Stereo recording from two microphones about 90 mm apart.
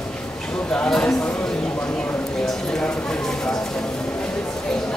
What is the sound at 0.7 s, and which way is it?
Speech, 10° left (ahead or behind).